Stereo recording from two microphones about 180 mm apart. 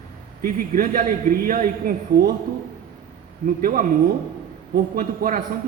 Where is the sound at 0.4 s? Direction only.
55° right (ahead or behind).